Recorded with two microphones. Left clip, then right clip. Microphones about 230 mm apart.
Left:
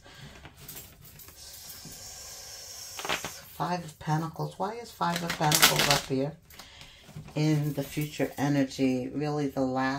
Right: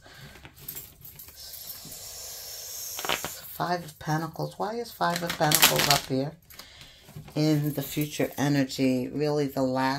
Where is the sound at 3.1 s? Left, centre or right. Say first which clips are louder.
Right 2 dB; right.